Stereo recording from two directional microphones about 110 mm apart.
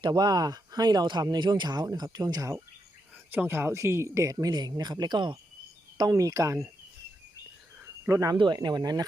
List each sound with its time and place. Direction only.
0.0 s speech: 40° right (ahead or behind)
6.0 s speech: 30° right (ahead or behind)
8.0 s speech: 30° right (ahead or behind)
8.4 s speech: 45° right (ahead or behind)